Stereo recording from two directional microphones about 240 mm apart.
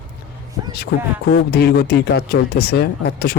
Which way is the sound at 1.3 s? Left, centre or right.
Left.